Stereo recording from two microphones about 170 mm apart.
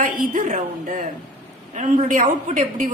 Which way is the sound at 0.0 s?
55° right (ahead or behind).